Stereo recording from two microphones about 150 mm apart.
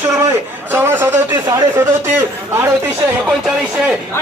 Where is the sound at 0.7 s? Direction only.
15° right (ahead or behind).